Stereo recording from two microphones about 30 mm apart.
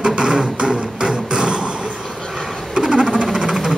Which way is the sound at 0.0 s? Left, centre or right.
Right.